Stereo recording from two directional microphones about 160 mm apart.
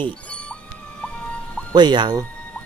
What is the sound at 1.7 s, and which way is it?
Speech, 25° right (ahead or behind).